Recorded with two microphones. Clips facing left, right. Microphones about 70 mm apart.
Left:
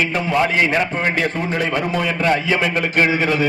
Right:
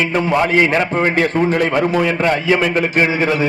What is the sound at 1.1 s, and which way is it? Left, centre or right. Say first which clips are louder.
A man's voice: right 6 dB; right.